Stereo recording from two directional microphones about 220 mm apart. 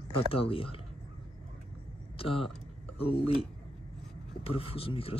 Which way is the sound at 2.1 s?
25° left (ahead or behind).